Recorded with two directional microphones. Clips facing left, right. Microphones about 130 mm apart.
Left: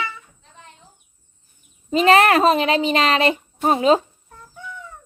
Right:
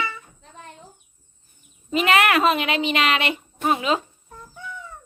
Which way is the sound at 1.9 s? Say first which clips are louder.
Left 5 dB; 35° left (ahead or behind).